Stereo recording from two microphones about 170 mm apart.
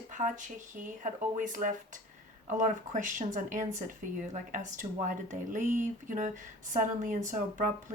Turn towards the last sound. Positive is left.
turn(degrees=-50)  # may be behind; listen again after turning